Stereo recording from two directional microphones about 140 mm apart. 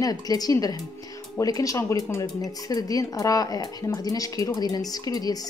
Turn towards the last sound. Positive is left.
turn(degrees=25)  # may be behind; listen again after turning